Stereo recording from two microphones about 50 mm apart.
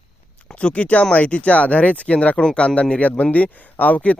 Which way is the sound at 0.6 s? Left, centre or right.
Left.